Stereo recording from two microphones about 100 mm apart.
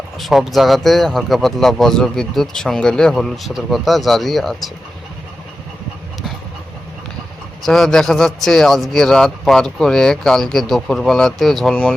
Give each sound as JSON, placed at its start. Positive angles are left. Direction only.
{"t": 0.2, "sound": "speech", "side_deg": 0}
{"t": 7.6, "sound": "speech", "side_deg": 5}